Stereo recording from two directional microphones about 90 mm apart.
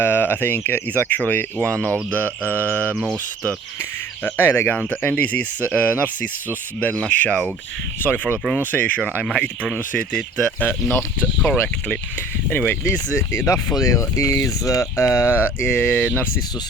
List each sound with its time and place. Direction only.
0.0 s speech: 25° left (ahead or behind)
4.2 s speech: 25° left (ahead or behind)
9.2 s speech: 10° left (ahead or behind)
10.7 s speech: 25° left (ahead or behind)
15.8 s speech: 15° left (ahead or behind)